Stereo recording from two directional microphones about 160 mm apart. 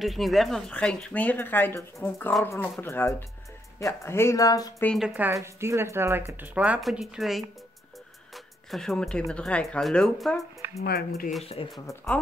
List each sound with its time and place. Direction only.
0.0 s speech: centre (ahead or behind); by 4.8 s 20° left (ahead or behind)
4.8 s speech: centre (ahead or behind)
5.1 s speech: 15° right (ahead or behind)
8.6 s speech: centre (ahead or behind)
10.8 s speech: 75° left (ahead or behind)
11.6 s speech: 35° left (ahead or behind)
11.9 s speech: 10° left (ahead or behind)